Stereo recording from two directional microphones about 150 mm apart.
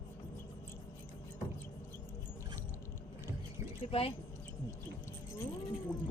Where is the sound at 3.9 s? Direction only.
40° left (ahead or behind).